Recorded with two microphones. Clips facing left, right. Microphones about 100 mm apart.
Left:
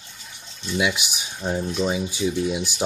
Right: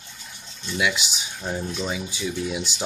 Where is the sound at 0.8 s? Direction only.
25° left (ahead or behind).